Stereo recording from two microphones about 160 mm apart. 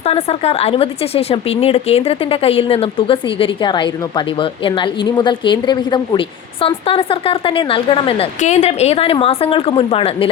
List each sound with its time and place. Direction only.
0.0 s a woman's voice: 40° left (ahead or behind)
8.4 s a woman's voice: 45° left (ahead or behind)